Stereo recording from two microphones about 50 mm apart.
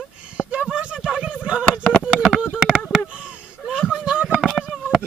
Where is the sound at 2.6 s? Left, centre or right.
Centre.